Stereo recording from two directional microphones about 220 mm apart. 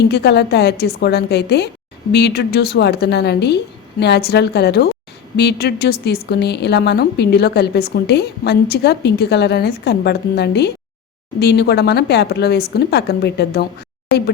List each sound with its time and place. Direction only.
0.1 s a woman's voice: 50° left (ahead or behind)